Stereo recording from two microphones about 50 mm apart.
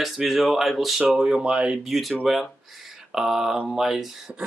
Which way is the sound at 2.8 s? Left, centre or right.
Centre.